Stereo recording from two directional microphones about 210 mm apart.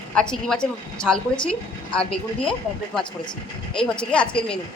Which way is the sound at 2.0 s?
25° left (ahead or behind).